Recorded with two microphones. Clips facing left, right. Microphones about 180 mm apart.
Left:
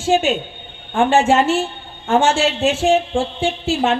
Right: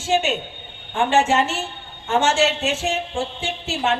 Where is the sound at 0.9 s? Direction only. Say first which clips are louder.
Left 4 dB; 50° left (ahead or behind).